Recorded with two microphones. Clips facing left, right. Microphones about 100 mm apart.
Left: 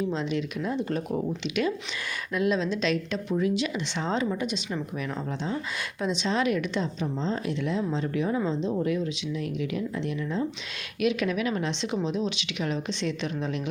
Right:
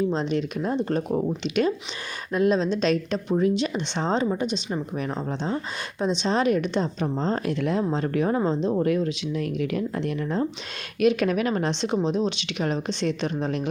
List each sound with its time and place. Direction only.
0.1 s a woman's voice: 35° right (ahead or behind)
7.0 s a woman's voice: 50° right (ahead or behind)
8.4 s a woman's voice: 40° right (ahead or behind)
8.8 s a woman's voice: 55° right (ahead or behind)